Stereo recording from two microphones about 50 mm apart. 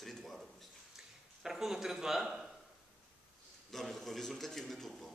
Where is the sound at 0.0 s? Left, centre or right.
Centre.